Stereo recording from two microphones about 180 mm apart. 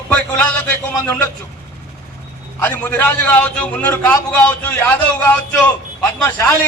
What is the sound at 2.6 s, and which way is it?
A man's voice, 10° left (ahead or behind).